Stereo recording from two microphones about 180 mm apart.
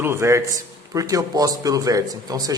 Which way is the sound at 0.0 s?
15° right (ahead or behind).